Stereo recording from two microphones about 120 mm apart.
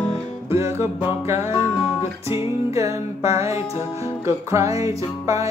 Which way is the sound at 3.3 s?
25° right (ahead or behind).